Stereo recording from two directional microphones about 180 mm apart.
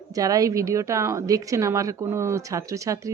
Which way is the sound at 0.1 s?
20° right (ahead or behind).